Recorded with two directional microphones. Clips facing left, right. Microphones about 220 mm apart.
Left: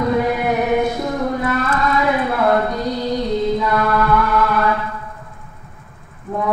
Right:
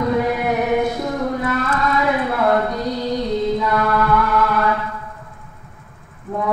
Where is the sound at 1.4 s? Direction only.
20° left (ahead or behind).